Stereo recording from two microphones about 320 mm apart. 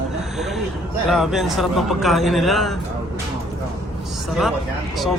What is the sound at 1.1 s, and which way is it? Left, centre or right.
A man's voice, centre.